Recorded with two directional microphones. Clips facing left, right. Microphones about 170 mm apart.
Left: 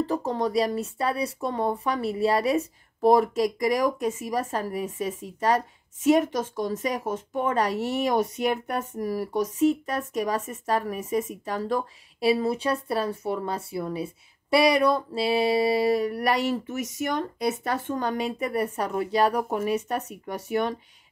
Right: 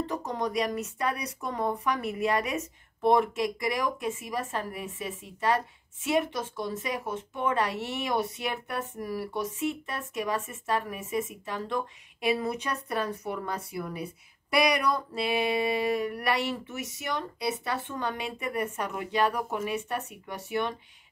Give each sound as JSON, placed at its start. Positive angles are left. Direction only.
{"t": 0.0, "sound": "speech", "side_deg": 30}